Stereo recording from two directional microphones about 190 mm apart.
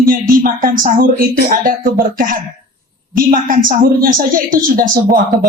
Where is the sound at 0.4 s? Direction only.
45° right (ahead or behind).